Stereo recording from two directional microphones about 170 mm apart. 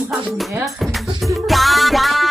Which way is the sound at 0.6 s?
Centre (ahead or behind).